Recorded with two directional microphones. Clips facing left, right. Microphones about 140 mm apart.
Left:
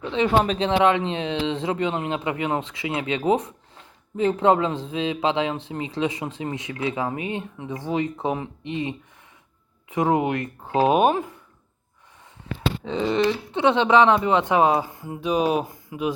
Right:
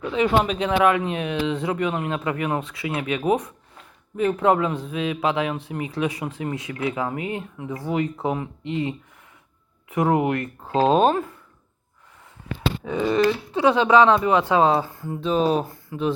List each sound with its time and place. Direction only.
0.0 s speech: 25° left (ahead or behind)
12.8 s speech: 25° left (ahead or behind)